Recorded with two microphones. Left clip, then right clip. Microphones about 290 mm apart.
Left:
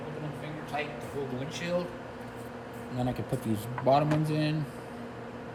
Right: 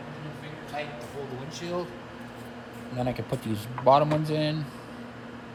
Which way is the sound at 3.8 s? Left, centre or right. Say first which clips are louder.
Right 5 dB; centre.